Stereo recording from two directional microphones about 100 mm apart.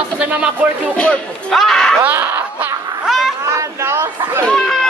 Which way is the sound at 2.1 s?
20° right (ahead or behind).